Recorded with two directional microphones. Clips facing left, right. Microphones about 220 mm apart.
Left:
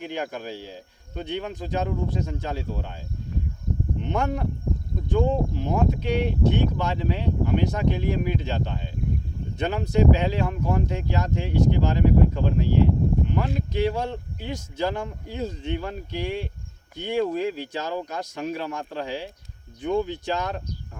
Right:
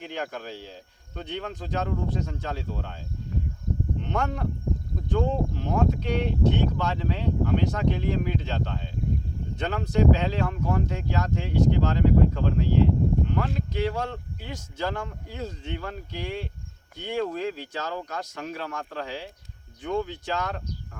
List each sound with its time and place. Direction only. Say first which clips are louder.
0.0 s speech: left 3 dB; 15° left (ahead or behind)
4.0 s speech: left 4 dB; 10° left (ahead or behind)